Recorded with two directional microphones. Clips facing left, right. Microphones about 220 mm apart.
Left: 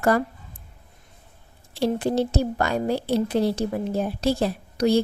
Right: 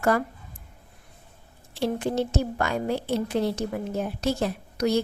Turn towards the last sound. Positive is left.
turn(degrees=30)  # may be behind; listen again after turning